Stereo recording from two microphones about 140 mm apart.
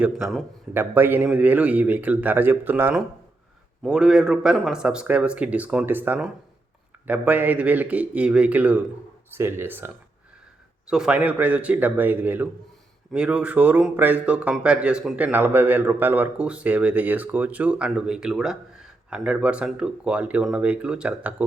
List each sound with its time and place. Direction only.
0.0 s a man's voice: 5° right (ahead or behind)
0.7 s a man's voice: 15° right (ahead or behind)